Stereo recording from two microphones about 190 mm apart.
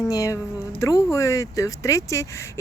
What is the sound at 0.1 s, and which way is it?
Speech, 15° left (ahead or behind).